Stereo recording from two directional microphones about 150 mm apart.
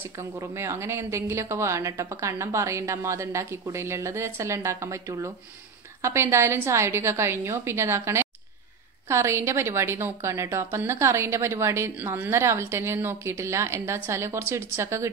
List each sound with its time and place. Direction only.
0.2 s a woman's voice: 20° right (ahead or behind)